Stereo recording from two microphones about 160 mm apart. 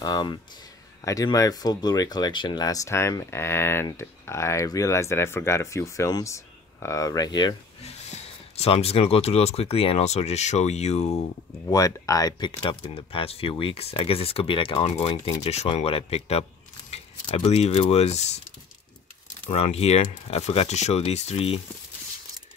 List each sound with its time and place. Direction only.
0.0 s speech: 25° left (ahead or behind)
7.8 s speech: 40° left (ahead or behind)
11.7 s speech: 20° left (ahead or behind); by 21.5 s 40° left (ahead or behind)